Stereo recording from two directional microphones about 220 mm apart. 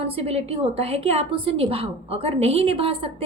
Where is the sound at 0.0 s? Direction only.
25° right (ahead or behind).